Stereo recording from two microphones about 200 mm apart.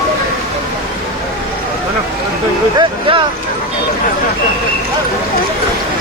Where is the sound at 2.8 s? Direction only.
25° right (ahead or behind).